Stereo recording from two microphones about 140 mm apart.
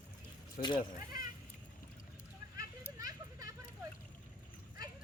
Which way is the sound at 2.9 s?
25° right (ahead or behind).